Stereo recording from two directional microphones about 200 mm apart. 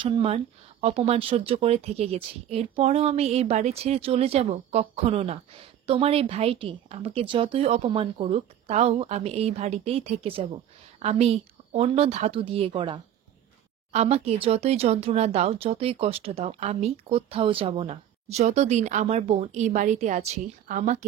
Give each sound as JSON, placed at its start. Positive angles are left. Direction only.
{"t": 0.0, "sound": "speech", "side_deg": -25}